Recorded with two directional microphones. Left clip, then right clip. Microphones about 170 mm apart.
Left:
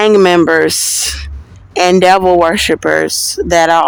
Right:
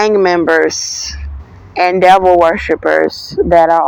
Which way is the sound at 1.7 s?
45° left (ahead or behind).